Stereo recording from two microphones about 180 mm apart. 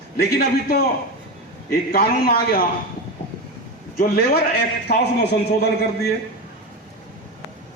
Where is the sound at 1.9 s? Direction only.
55° left (ahead or behind).